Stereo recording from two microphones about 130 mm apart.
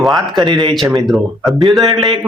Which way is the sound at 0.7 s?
Centre (ahead or behind).